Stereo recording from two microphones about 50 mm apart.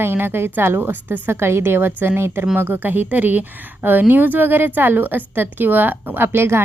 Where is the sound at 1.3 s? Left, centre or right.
Right.